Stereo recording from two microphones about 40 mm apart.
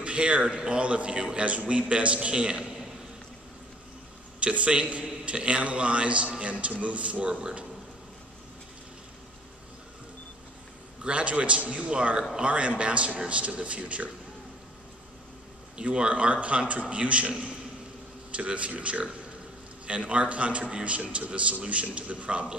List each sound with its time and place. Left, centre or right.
0.0 s a man's voice: right
2.3 s a man's voice: right
4.4 s a man's voice: right
11.1 s a man's voice: right
12.4 s a man's voice: right
15.8 s a man's voice: right
17.3 s a man's voice: right
18.3 s a man's voice: right